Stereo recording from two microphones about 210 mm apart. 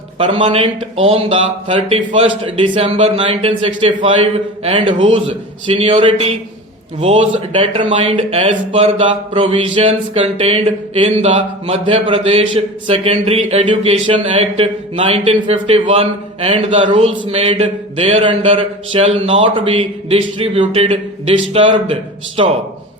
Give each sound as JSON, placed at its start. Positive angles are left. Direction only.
{"t": 0.2, "sound": "speech", "side_deg": -25}